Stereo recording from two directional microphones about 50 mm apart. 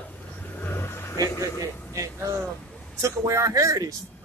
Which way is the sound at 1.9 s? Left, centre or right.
Right.